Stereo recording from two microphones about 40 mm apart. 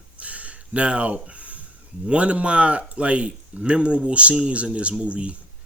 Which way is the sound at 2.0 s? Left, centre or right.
Right.